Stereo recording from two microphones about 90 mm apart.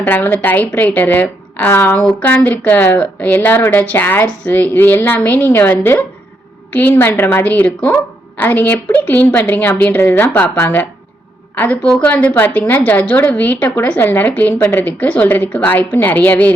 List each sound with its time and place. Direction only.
0.0 s a woman's voice: 25° left (ahead or behind)